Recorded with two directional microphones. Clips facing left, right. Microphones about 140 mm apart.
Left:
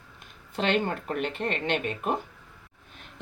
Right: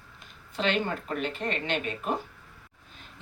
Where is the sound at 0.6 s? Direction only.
55° left (ahead or behind).